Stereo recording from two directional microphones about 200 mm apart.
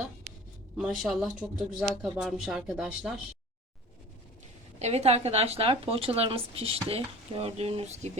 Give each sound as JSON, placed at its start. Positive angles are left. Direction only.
{"t": 0.8, "sound": "speech", "side_deg": 0}
{"t": 4.8, "sound": "a woman's voice", "side_deg": -35}